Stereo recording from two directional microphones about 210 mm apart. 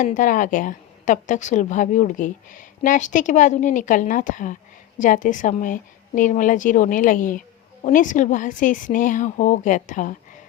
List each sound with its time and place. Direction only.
0.0 s a woman's voice: 35° left (ahead or behind)